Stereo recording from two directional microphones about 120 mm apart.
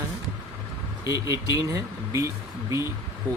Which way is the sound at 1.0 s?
25° right (ahead or behind).